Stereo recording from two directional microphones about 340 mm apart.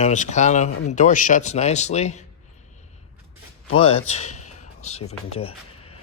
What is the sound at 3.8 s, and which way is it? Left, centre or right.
Speech, centre.